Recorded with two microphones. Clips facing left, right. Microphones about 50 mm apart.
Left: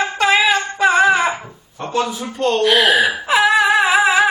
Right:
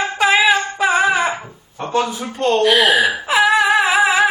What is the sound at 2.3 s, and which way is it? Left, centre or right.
Speech, right.